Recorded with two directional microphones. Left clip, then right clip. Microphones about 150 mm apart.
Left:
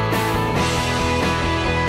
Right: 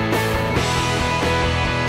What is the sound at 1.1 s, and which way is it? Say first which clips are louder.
Music: right 1 dB; centre (ahead or behind).